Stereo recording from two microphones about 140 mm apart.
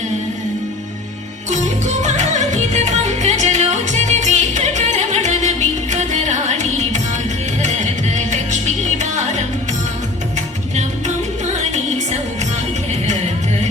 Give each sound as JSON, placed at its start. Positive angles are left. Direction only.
{"t": 1.5, "sound": "music", "side_deg": -55}
{"t": 12.9, "sound": "music", "side_deg": -55}